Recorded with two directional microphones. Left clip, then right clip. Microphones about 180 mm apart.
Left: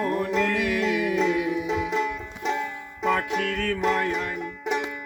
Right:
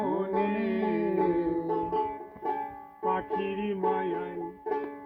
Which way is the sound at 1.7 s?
35° left (ahead or behind).